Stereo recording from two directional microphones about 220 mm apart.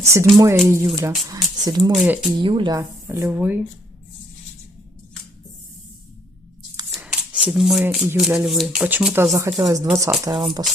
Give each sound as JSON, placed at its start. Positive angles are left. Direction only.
{"t": 0.0, "sound": "speech", "side_deg": -15}
{"t": 1.9, "sound": "speech", "side_deg": 0}
{"t": 2.4, "sound": "speech", "side_deg": -20}
{"t": 6.9, "sound": "speech", "side_deg": -5}